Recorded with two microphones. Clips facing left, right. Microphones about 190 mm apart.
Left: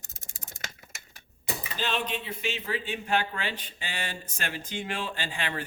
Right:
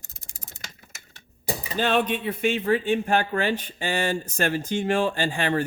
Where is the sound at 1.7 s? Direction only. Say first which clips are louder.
Right 9 dB; 55° right (ahead or behind).